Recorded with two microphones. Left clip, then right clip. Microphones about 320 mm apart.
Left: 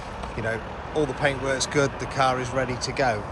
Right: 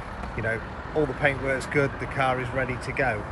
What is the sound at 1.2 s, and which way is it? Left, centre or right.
Speech, centre.